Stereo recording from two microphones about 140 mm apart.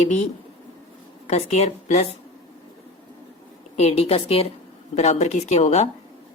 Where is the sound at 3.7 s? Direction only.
45° left (ahead or behind).